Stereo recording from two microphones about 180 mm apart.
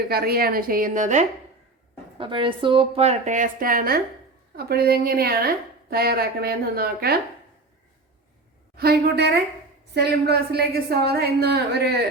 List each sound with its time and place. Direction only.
0.1 s a woman's voice: 60° right (ahead or behind); by 1.3 s 40° right (ahead or behind)
2.1 s a woman's voice: 30° right (ahead or behind); by 7.2 s 55° right (ahead or behind)
8.7 s a woman's voice: 60° right (ahead or behind)